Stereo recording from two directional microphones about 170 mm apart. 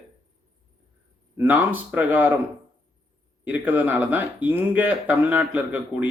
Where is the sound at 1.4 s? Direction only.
10° right (ahead or behind).